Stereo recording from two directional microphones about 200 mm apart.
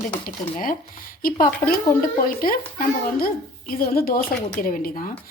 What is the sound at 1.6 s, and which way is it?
Speech, 10° left (ahead or behind).